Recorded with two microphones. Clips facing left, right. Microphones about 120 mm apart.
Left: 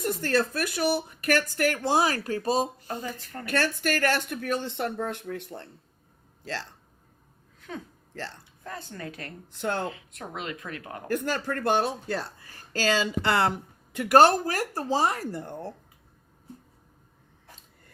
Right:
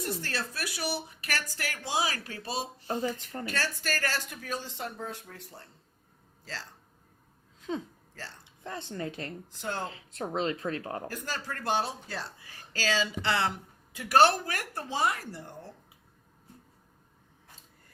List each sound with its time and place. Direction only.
0.0 s speech: 50° left (ahead or behind)
2.8 s a woman's voice: 25° right (ahead or behind)
3.4 s speech: 55° left (ahead or behind)
8.6 s a woman's voice: 25° right (ahead or behind)
9.6 s speech: 55° left (ahead or behind)
9.9 s speech: 30° right (ahead or behind)
11.1 s speech: 55° left (ahead or behind)
13.9 s a woman's voice: 60° left (ahead or behind)
14.2 s speech: 40° left (ahead or behind)